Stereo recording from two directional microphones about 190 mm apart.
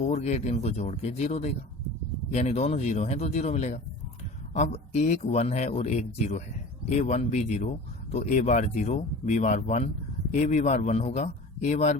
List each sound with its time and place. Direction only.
0.0 s speech: 40° left (ahead or behind)